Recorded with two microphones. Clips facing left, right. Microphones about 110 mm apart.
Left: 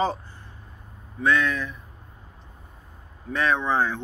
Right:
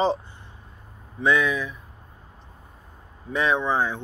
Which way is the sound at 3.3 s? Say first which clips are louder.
Right 1 dB; 15° right (ahead or behind).